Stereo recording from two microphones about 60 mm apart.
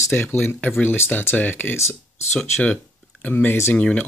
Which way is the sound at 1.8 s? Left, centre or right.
Left.